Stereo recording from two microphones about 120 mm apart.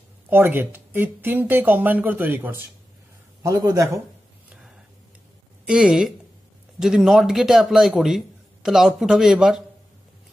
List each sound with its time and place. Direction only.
0.3 s speech: 20° right (ahead or behind)
3.4 s a man's voice: 30° right (ahead or behind)
5.7 s a man's voice: 10° right (ahead or behind)